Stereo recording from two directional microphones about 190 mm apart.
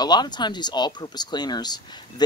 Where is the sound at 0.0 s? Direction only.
20° left (ahead or behind).